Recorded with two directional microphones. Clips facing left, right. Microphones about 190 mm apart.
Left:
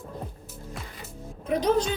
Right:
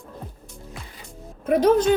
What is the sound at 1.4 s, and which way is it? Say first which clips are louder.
Speech: right 6 dB; 55° right (ahead or behind).